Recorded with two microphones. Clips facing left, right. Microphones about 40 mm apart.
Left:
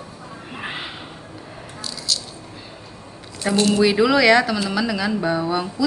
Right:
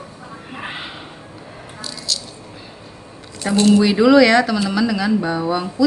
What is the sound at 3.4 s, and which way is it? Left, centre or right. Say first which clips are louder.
Speech: right 3 dB; centre.